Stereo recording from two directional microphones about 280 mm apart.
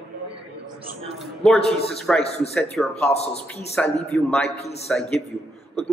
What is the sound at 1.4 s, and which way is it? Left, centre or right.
Speech, centre.